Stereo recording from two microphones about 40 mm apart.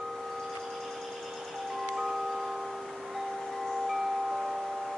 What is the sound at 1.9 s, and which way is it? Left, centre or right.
Chime, centre.